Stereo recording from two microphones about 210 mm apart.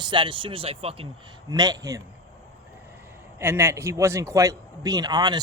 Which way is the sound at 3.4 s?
10° right (ahead or behind).